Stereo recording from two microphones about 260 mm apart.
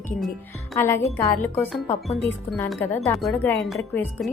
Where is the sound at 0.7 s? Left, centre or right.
Centre.